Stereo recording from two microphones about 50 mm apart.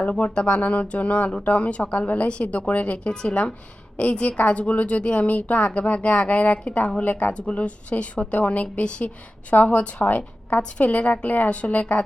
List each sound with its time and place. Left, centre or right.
0.0 s a woman's voice: left
11.4 s a woman's voice: left
11.7 s a woman's voice: left